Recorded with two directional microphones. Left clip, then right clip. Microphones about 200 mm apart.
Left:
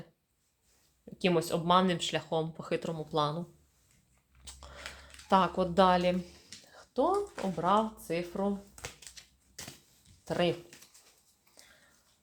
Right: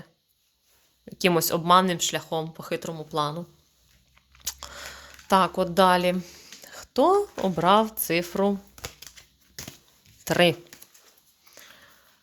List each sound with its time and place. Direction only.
1.0 s speech: 25° right (ahead or behind)
4.3 s biting: 25° right (ahead or behind)
5.3 s speech: 20° right (ahead or behind); by 8.5 s 40° right (ahead or behind)
8.7 s typewriter: 30° right (ahead or behind)
10.2 s speech: 35° right (ahead or behind)